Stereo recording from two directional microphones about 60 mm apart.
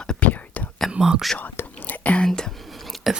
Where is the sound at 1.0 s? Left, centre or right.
Centre.